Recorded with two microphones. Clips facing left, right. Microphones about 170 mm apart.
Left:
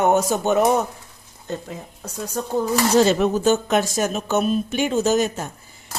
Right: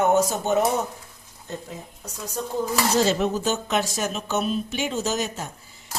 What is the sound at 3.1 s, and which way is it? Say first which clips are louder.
Speech: left 5 dB; 50° left (ahead or behind).